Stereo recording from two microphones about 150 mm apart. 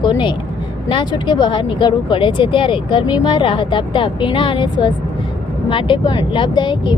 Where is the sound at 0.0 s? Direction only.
30° left (ahead or behind).